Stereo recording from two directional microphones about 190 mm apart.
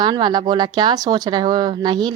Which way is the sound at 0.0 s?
25° right (ahead or behind).